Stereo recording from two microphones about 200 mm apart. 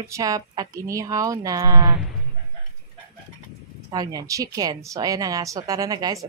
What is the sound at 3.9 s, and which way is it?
A woman's voice, 20° right (ahead or behind).